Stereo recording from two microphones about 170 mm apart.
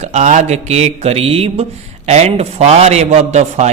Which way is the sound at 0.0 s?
45° right (ahead or behind).